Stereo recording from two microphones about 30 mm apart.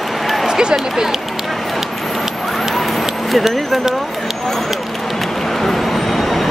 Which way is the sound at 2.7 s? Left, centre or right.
Centre.